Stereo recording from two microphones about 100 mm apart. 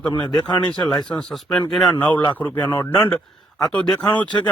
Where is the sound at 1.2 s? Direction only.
Centre (ahead or behind).